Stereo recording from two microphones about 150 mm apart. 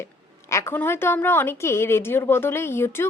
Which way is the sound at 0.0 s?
20° left (ahead or behind).